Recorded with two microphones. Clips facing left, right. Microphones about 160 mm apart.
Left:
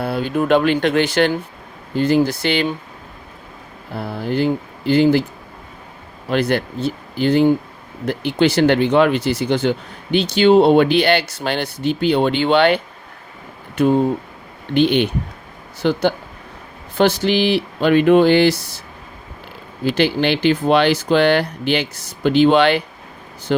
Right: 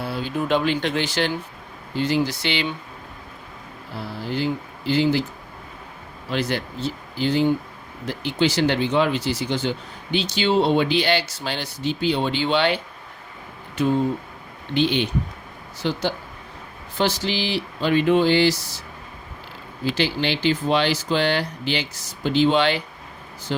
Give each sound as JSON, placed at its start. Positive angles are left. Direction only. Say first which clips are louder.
{"t": 0.0, "sound": "speech", "louder": "left 6 dB", "side_deg": 55}
{"t": 3.9, "sound": "speech", "louder": "left 7 dB", "side_deg": 55}
{"t": 6.2, "sound": "speech", "louder": "left 7 dB", "side_deg": 55}
{"t": 19.8, "sound": "speech", "louder": "left 6 dB", "side_deg": 60}